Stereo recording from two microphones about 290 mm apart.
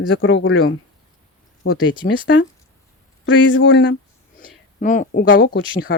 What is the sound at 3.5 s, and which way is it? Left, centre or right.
Speech, left.